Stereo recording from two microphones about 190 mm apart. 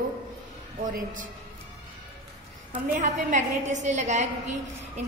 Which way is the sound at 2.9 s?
40° right (ahead or behind).